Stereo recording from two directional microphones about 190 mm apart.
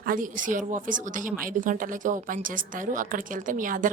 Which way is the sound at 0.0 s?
45° right (ahead or behind).